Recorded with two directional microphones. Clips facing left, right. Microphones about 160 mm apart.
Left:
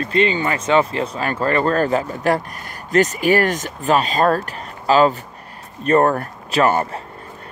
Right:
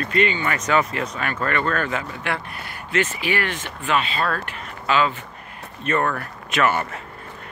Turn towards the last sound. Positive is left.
turn(degrees=35)  # may be behind; listen again after turning